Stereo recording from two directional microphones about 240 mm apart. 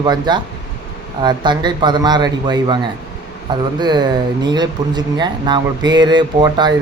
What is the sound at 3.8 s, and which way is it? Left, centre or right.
Speech, centre.